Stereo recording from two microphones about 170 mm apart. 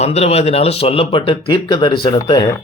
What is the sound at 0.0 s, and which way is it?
Speech, 40° left (ahead or behind).